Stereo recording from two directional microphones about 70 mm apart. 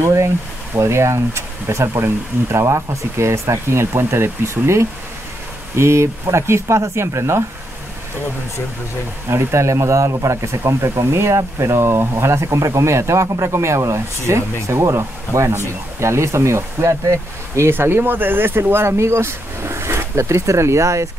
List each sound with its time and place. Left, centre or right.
0.0 s speech: right
9.3 s speech: right
17.7 s speech: right